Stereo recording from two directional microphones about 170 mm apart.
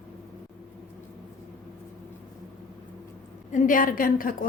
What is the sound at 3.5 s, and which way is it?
Speech, 50° left (ahead or behind).